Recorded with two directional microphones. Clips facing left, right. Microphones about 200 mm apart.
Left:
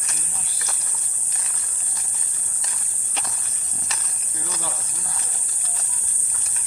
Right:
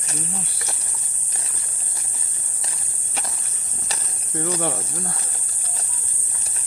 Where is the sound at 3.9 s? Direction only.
35° right (ahead or behind).